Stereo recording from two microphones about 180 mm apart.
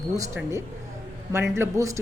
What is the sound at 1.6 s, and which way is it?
Speech, 15° right (ahead or behind).